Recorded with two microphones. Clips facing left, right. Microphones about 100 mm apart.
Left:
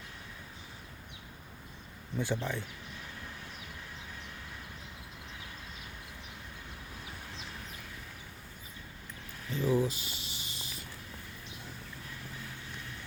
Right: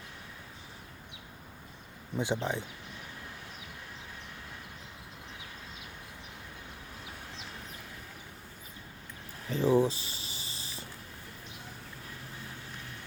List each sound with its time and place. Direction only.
2.1 s speech: 20° right (ahead or behind)
9.5 s snake: 30° right (ahead or behind)